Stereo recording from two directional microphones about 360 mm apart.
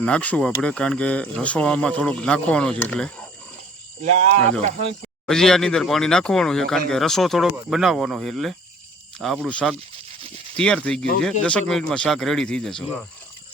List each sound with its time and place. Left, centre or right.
0.0 s speech: centre
4.0 s speech: centre
5.2 s speech: centre